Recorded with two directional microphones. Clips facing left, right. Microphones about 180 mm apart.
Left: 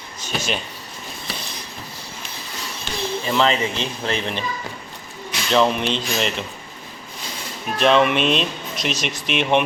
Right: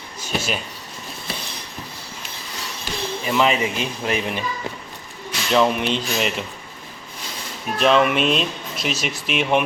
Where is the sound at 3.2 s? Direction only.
10° right (ahead or behind).